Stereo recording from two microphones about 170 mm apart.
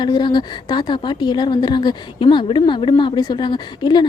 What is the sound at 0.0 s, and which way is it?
Speech, 25° left (ahead or behind).